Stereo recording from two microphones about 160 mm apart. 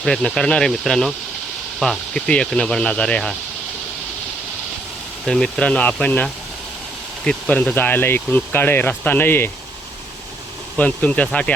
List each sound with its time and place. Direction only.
0.0 s speech: 5° left (ahead or behind)
5.2 s speech: 5° left (ahead or behind)
10.8 s speech: 10° left (ahead or behind)